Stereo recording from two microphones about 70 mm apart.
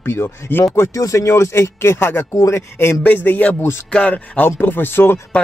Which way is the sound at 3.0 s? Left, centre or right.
Left.